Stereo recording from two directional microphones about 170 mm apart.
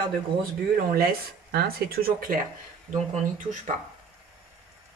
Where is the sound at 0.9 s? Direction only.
65° right (ahead or behind).